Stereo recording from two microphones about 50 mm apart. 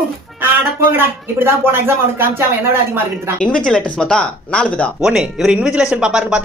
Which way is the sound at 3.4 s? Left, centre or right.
Left.